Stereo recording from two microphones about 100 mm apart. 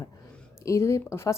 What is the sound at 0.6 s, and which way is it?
Speech, 30° left (ahead or behind).